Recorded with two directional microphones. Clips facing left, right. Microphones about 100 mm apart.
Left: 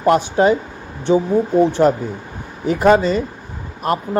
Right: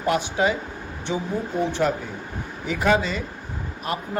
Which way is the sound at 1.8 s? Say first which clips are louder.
Left 8 dB; 35° left (ahead or behind).